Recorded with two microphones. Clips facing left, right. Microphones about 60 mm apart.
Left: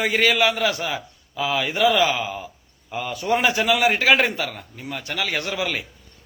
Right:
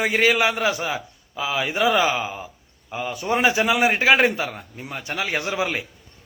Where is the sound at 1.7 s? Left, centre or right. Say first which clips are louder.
Left 1 dB; right.